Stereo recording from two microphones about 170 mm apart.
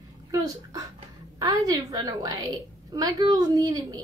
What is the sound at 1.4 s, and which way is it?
A woman's voice, 20° right (ahead or behind).